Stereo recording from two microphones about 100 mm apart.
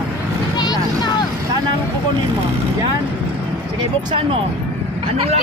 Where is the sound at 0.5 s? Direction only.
45° left (ahead or behind).